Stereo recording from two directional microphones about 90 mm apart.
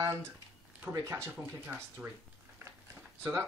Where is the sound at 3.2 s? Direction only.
30° right (ahead or behind).